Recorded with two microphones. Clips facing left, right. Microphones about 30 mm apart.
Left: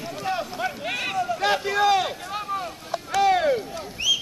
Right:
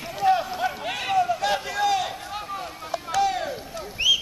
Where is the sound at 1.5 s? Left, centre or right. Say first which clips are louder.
Left 3 dB; centre.